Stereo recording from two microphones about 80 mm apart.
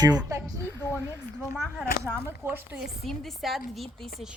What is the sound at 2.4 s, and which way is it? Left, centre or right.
Speech, right.